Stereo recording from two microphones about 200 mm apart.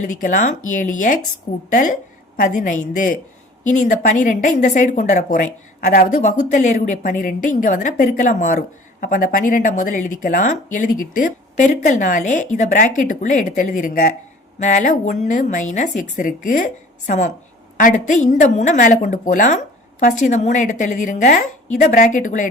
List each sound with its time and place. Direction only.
0.0 s a woman's voice: 40° left (ahead or behind)